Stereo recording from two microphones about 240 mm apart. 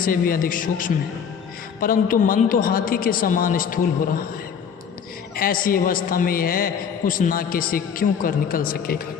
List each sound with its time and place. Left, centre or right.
0.0 s a man's voice: left
5.4 s a man's voice: left